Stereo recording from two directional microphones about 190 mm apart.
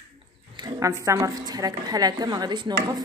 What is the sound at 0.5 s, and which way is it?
A woman's voice, 20° right (ahead or behind).